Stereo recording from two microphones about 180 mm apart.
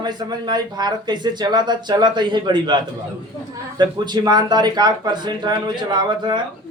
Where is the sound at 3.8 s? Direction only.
25° right (ahead or behind).